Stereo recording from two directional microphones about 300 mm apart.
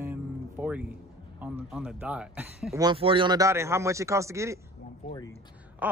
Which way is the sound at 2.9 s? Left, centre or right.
Centre.